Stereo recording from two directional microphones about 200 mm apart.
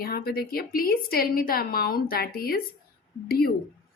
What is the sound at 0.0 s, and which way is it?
Speech, 50° left (ahead or behind).